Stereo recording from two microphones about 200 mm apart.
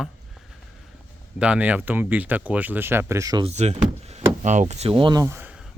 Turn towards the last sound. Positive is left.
turn(degrees=-10)  # may be behind; listen again after turning